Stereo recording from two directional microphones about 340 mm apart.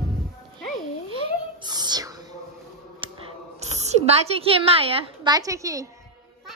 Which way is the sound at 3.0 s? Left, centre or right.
Centre.